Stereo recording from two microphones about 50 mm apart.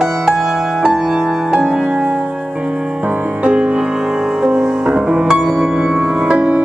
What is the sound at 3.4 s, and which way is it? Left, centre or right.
Music, right.